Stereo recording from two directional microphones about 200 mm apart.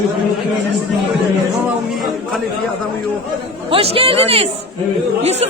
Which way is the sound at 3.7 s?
30° right (ahead or behind).